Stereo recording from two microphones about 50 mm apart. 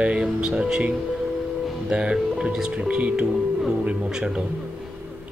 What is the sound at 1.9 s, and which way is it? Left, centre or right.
Speech, centre.